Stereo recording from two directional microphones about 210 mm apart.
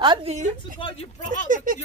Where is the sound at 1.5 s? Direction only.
40° right (ahead or behind).